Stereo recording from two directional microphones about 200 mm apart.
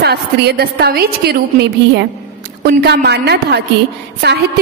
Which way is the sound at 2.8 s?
55° right (ahead or behind).